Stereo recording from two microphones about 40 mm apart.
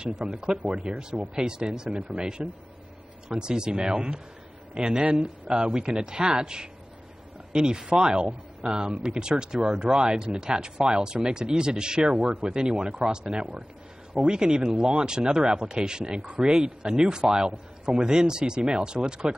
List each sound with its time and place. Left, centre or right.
0.0 s a man's voice: right
5.7 s a man's voice: centre